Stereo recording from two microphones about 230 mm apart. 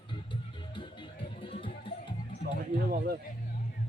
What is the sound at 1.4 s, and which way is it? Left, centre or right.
Music, left.